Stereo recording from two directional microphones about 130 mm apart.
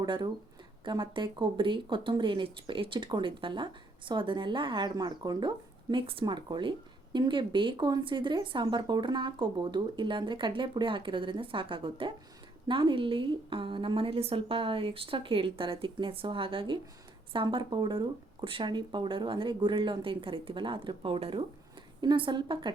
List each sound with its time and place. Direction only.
0.0 s speech: 35° right (ahead or behind)